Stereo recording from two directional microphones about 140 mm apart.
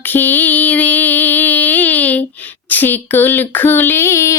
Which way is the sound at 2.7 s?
15° left (ahead or behind).